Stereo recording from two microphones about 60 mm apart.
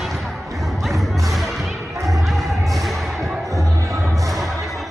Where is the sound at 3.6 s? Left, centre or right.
Right.